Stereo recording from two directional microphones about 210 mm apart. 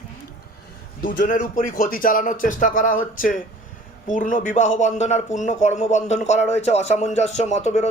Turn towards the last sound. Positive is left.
turn(degrees=30)  # may be behind; listen again after turning